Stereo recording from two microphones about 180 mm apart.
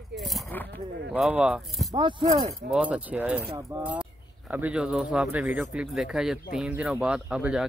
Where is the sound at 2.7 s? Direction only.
5° right (ahead or behind).